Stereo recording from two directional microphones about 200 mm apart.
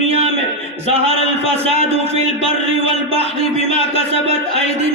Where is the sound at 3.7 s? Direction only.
30° right (ahead or behind).